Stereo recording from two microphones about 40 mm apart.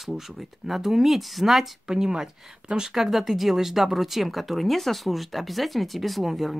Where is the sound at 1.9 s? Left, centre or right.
Centre.